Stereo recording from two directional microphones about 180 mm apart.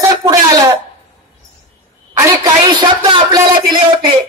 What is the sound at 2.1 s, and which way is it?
A woman's voice, 15° right (ahead or behind).